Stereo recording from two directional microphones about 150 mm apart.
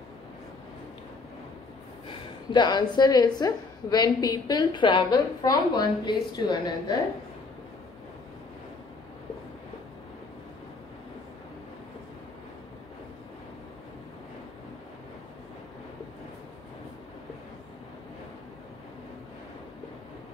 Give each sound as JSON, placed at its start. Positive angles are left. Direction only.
{"t": 2.0, "sound": "a woman's voice", "side_deg": 30}